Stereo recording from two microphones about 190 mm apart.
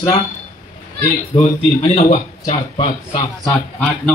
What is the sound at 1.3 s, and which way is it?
Speech, 35° left (ahead or behind).